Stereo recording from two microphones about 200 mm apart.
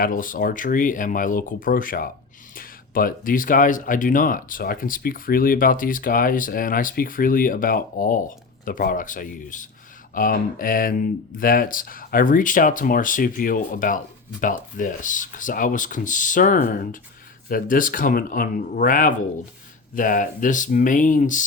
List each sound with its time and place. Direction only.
0.0 s speech: 45° left (ahead or behind)